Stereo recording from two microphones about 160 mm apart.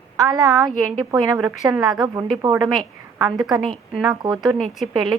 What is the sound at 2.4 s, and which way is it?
Speech, 25° right (ahead or behind).